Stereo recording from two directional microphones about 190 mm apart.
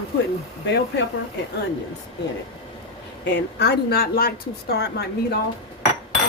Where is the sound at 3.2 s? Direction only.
60° left (ahead or behind).